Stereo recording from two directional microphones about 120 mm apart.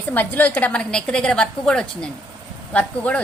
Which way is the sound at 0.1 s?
15° left (ahead or behind).